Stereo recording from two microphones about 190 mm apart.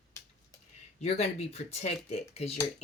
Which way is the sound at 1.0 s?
35° left (ahead or behind).